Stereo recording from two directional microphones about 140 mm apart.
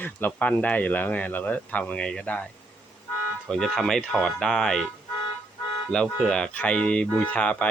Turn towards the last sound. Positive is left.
turn(degrees=10)  # may be behind; listen again after turning